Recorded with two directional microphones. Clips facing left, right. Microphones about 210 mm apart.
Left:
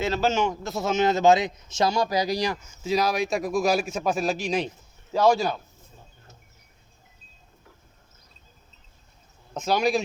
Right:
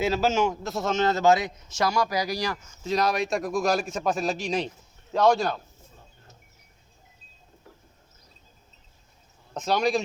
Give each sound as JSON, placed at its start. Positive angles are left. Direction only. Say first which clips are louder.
{"t": 0.0, "sound": "a man's voice", "louder": "right 1 dB", "side_deg": -5}
{"t": 2.8, "sound": "a man's voice", "louder": "left 1 dB", "side_deg": 5}
{"t": 9.6, "sound": "a man's voice", "louder": "left 1 dB", "side_deg": 0}